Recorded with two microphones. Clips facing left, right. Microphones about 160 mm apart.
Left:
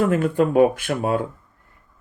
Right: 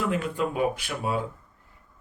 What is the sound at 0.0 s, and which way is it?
Speech, 50° left (ahead or behind).